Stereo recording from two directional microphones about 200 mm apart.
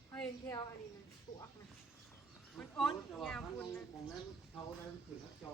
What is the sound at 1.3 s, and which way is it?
Speech, 20° left (ahead or behind).